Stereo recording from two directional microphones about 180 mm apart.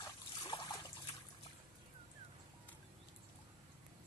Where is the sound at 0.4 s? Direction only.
25° left (ahead or behind).